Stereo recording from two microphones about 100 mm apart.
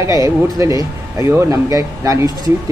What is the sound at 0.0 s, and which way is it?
A man's voice, 35° right (ahead or behind).